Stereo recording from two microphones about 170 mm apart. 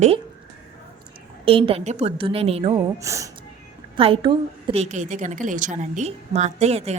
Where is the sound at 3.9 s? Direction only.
30° right (ahead or behind).